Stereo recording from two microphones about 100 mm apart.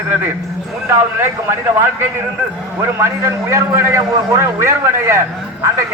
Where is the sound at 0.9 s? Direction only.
25° right (ahead or behind).